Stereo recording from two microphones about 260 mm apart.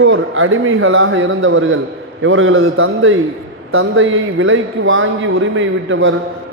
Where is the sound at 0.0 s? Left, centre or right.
Right.